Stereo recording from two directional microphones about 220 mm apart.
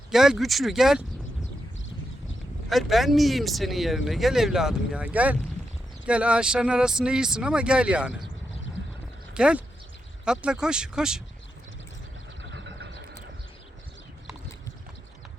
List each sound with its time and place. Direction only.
0.1 s speech: centre (ahead or behind)
2.6 s speech: centre (ahead or behind)
9.3 s speech: 5° right (ahead or behind)
12.4 s vehicle: 55° right (ahead or behind)